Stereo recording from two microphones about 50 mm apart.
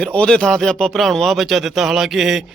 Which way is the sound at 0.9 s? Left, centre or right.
Centre.